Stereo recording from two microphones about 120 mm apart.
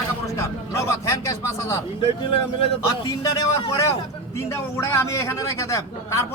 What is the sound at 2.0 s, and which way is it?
Speech, 50° left (ahead or behind).